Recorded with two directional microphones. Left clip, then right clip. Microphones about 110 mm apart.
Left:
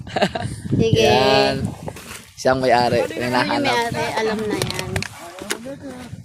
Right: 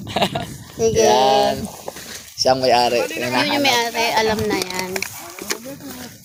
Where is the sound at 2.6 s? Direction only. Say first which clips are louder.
Left 1 dB; 60° left (ahead or behind).